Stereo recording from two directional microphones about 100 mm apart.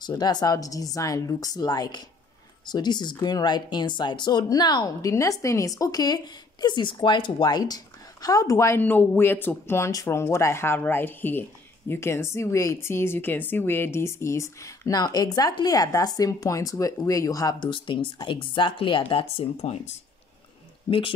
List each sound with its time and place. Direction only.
0.0 s a woman's voice: 45° left (ahead or behind)
8.8 s a woman's voice: 20° left (ahead or behind); by 20.0 s 90° left
20.9 s speech: 50° left (ahead or behind)